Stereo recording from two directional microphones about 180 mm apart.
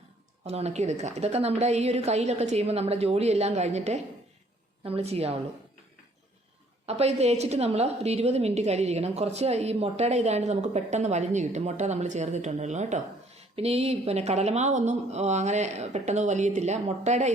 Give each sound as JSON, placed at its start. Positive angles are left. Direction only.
{"t": 0.4, "sound": "a woman's voice", "side_deg": -35}
{"t": 6.8, "sound": "a woman's voice", "side_deg": -35}